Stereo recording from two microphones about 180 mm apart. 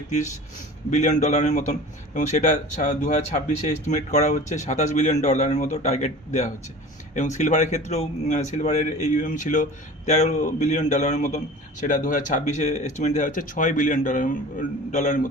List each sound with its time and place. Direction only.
0.9 s a man's voice: 40° left (ahead or behind)